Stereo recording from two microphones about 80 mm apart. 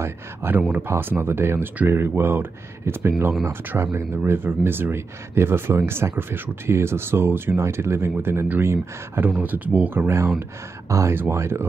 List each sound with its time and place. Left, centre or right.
0.0 s speech: right